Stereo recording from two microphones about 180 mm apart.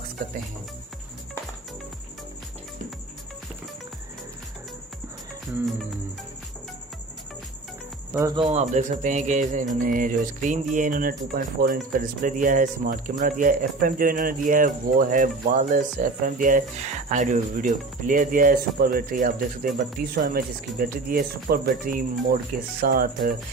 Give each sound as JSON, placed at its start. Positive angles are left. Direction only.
{"t": 8.4, "sound": "speech", "side_deg": -35}